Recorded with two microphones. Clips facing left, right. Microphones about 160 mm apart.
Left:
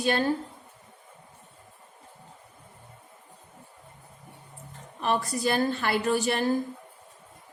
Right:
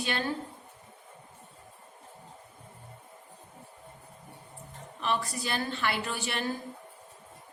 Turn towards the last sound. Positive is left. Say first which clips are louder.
# left 8 dB
turn(degrees=40)  # may be behind; listen again after turning